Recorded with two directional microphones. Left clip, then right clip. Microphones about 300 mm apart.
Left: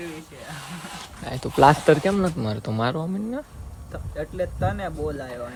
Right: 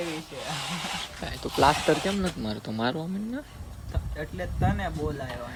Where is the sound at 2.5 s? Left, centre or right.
Centre.